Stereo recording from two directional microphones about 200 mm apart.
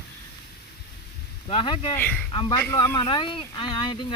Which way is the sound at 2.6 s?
15° left (ahead or behind).